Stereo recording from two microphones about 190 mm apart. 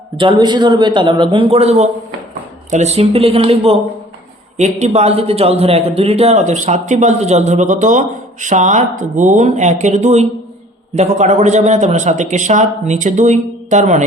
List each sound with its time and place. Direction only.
0.2 s a man's voice: 25° right (ahead or behind)